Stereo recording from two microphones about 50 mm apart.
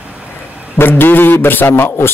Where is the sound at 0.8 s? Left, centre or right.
Left.